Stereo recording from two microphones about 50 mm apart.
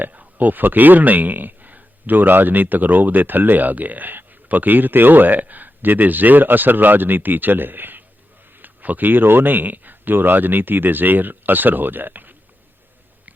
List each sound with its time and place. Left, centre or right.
0.0 s speech: right